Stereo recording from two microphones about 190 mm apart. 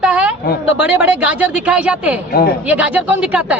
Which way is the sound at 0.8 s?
5° right (ahead or behind).